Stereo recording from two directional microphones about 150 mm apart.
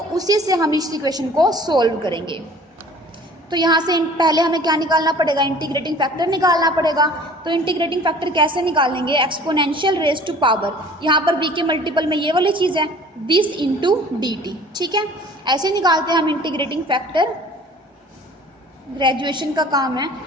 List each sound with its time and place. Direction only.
0.1 s a woman's voice: 25° right (ahead or behind)
3.5 s a woman's voice: 30° right (ahead or behind)
18.9 s a woman's voice: 30° right (ahead or behind)